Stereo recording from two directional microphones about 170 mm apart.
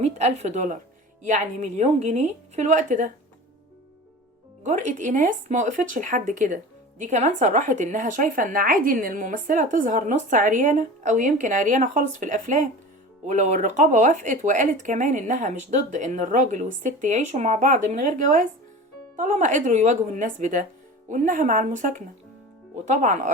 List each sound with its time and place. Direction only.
0.0 s a woman's voice: 40° right (ahead or behind)
4.6 s speech: 45° right (ahead or behind)